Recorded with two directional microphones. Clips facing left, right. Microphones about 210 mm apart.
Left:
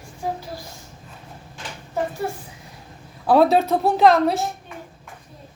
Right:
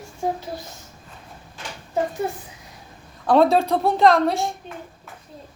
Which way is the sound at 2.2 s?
20° right (ahead or behind).